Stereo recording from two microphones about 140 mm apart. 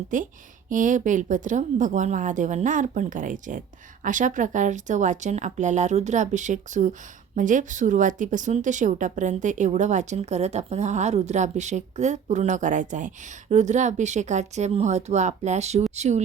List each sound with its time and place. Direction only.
0.1 s speech: 65° right (ahead or behind)